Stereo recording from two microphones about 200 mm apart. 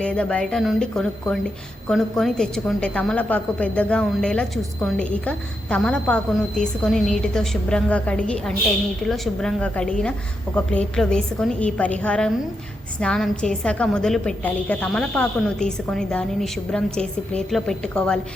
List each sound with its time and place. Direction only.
0.0 s a woman's voice: 5° left (ahead or behind)